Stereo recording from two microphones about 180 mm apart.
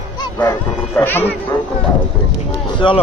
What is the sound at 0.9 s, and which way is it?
Speech, 10° left (ahead or behind).